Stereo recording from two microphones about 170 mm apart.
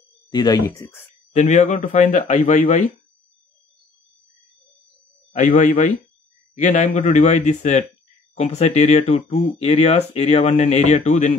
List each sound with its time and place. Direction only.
0.3 s speech: 25° left (ahead or behind)
1.3 s speech: 45° left (ahead or behind)
5.3 s speech: 45° left (ahead or behind)